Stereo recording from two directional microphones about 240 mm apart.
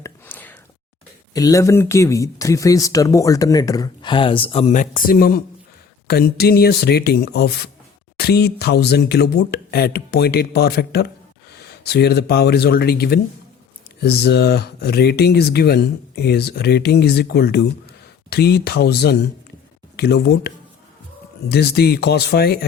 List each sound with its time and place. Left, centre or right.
0.0 s a sound: centre
1.3 s speech: centre; by 20.5 s left
21.5 s speech: left